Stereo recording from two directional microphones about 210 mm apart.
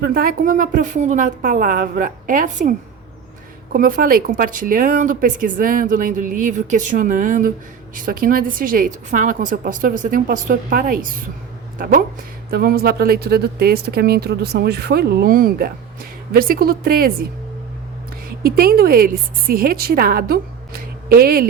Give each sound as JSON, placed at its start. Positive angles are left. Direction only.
{"t": 0.0, "sound": "speech", "side_deg": -45}
{"t": 18.4, "sound": "speech", "side_deg": -45}